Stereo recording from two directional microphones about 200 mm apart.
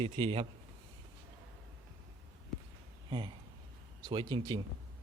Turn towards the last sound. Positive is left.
turn(degrees=-20)  # may be behind; listen again after turning